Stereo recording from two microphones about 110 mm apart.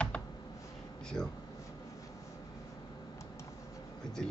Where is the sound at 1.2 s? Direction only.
35° left (ahead or behind).